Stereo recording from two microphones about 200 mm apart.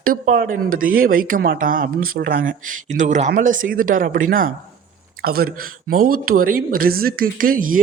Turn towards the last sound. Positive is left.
turn(degrees=-45)  # may be behind; listen again after turning